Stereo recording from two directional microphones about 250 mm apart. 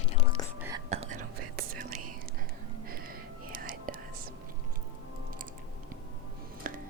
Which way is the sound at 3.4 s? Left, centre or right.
Right.